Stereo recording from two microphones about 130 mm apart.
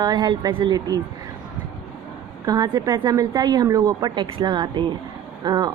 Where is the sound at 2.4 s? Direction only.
30° right (ahead or behind).